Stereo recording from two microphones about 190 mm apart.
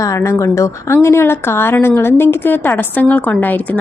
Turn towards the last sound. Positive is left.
turn(degrees=10)  # may be behind; listen again after turning